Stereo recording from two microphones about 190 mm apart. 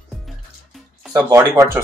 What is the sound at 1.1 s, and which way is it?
Speech, 15° right (ahead or behind).